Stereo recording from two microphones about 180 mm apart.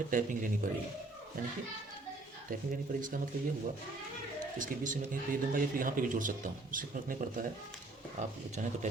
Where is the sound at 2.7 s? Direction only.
50° right (ahead or behind).